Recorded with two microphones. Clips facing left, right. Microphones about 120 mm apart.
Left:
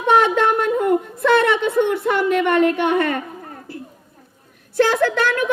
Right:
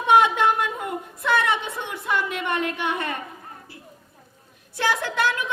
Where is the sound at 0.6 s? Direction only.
55° left (ahead or behind).